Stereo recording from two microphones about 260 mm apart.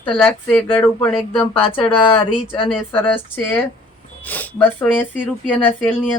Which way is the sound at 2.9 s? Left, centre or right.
Centre.